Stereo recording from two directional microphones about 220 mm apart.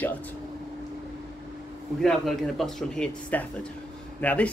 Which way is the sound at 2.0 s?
Centre (ahead or behind).